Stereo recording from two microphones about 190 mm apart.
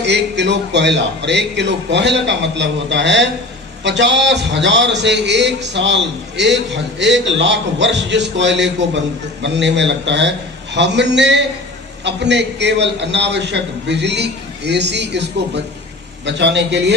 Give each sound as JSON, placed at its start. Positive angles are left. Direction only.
{"t": 0.0, "sound": "a man's voice", "side_deg": -65}